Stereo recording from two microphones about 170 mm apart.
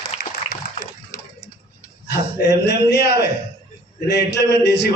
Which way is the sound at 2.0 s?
85° left.